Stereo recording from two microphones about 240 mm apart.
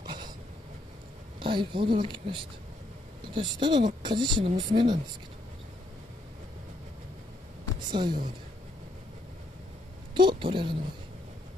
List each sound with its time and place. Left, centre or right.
0.0 s vehicle: centre
1.4 s speech: right
7.9 s speech: centre
10.1 s a woman's voice: centre